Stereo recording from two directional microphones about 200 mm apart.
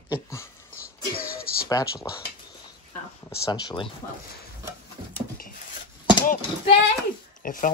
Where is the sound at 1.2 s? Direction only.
50° left (ahead or behind).